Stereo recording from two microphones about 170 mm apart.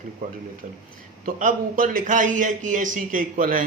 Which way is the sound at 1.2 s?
50° right (ahead or behind).